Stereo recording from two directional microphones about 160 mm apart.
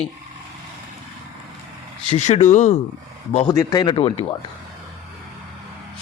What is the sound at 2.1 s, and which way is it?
Speech, 45° left (ahead or behind).